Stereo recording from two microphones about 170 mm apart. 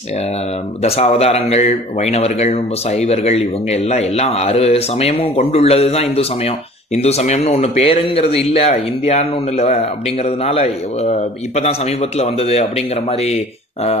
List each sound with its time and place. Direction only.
0.8 s speech: 35° left (ahead or behind)